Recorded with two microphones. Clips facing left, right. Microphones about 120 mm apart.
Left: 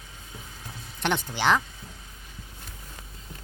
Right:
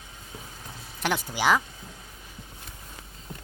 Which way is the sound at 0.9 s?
5° right (ahead or behind).